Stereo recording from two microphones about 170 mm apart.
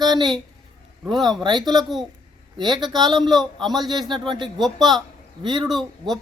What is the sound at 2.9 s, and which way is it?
Speech, 25° right (ahead or behind).